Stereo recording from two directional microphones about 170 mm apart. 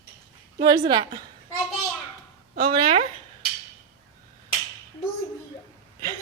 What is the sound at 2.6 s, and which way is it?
Speech, 30° right (ahead or behind).